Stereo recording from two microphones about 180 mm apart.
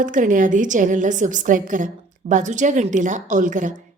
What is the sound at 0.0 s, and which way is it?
A woman's voice, 45° right (ahead or behind).